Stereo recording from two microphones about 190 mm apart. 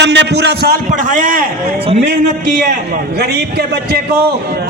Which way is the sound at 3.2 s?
60° right (ahead or behind).